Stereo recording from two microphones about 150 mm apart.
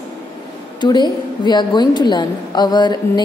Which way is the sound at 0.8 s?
30° left (ahead or behind).